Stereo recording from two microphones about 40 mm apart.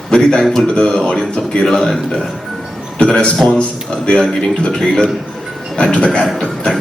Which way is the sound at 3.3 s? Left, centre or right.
Centre.